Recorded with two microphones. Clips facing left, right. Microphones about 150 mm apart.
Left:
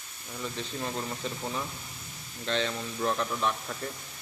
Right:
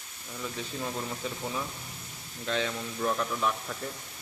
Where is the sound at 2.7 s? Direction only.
5° left (ahead or behind).